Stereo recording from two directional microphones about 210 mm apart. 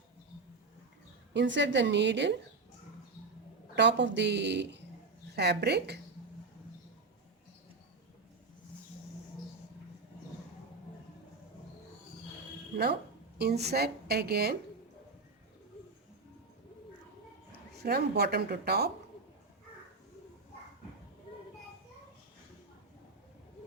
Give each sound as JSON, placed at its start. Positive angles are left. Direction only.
{"t": 1.3, "sound": "a woman's voice", "side_deg": -60}
{"t": 3.8, "sound": "a woman's voice", "side_deg": -55}
{"t": 13.4, "sound": "a woman's voice", "side_deg": -50}
{"t": 17.7, "sound": "a woman's voice", "side_deg": -50}